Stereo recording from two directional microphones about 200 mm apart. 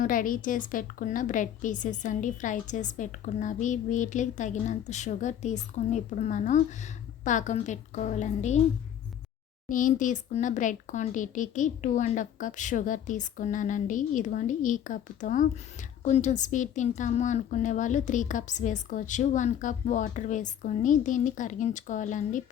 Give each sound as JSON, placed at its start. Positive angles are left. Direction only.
{"t": 0.0, "sound": "a woman's voice", "side_deg": 45}
{"t": 9.6, "sound": "a woman's voice", "side_deg": 40}